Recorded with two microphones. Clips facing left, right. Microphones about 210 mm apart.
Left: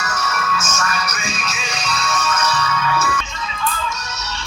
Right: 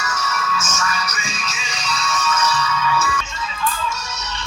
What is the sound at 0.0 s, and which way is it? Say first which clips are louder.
Music: left 1 dB; 60° left (ahead or behind).